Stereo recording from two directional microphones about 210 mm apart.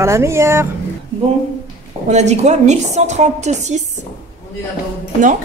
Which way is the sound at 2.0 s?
35° right (ahead or behind).